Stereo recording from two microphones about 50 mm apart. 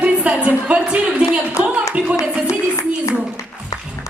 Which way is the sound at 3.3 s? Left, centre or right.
Left.